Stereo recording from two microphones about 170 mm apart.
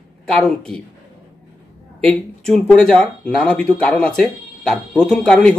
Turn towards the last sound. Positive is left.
turn(degrees=5)  # may be behind; listen again after turning